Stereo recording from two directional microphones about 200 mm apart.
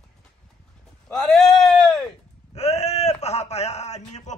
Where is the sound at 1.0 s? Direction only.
5° left (ahead or behind).